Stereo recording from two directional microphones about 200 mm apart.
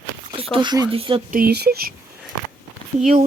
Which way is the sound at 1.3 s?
50° right (ahead or behind).